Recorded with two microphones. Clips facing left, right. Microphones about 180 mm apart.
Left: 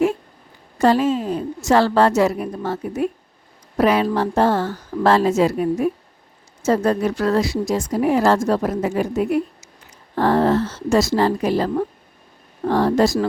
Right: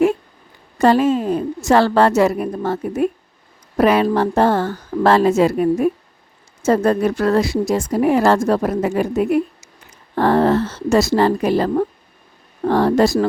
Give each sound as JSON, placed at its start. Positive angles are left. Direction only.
{"t": 0.8, "sound": "speech", "side_deg": -55}